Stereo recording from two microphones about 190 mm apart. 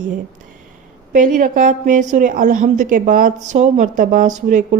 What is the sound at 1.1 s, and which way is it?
A woman's voice, 45° right (ahead or behind).